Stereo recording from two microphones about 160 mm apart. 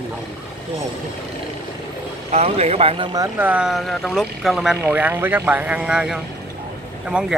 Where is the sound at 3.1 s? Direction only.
10° right (ahead or behind).